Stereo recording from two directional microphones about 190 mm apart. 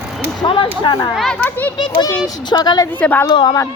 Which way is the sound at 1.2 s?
5° left (ahead or behind).